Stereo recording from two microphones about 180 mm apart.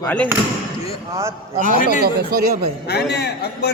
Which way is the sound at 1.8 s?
50° left (ahead or behind).